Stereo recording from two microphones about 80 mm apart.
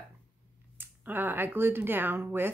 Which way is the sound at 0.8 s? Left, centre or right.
Right.